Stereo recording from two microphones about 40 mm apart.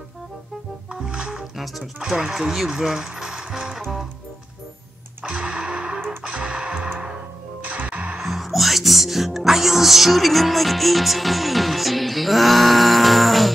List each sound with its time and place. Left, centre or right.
0.8 s music: centre
1.6 s speech: centre
2.0 s speech: centre
5.2 s music: right
7.6 s music: right
8.2 s speech: centre